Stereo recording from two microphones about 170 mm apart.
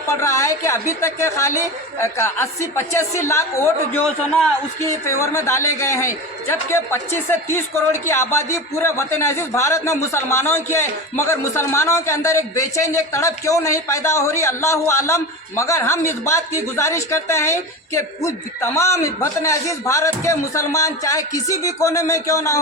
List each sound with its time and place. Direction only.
0.1 s a man's voice: 20° left (ahead or behind)